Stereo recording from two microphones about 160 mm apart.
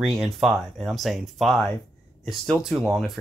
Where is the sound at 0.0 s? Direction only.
Centre (ahead or behind).